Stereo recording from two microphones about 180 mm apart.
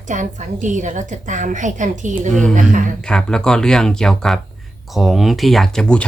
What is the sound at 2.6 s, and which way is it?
Speech, 45° right (ahead or behind).